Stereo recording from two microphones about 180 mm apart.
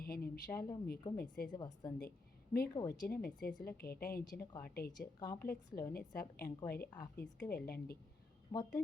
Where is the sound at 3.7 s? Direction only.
55° left (ahead or behind).